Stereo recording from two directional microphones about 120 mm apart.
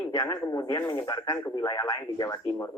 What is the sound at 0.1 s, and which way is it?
A man's voice, 30° left (ahead or behind).